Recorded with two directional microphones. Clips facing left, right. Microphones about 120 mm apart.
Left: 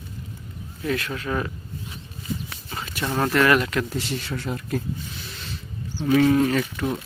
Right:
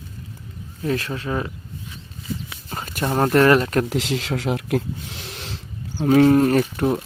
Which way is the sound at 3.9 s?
90° right.